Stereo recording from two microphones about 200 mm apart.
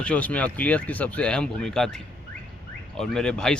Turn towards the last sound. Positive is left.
turn(degrees=5)  # may be behind; listen again after turning